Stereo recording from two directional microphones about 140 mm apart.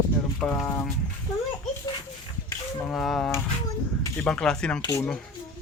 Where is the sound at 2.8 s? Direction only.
5° left (ahead or behind).